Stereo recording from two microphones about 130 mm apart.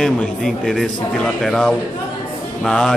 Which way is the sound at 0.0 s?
5° left (ahead or behind).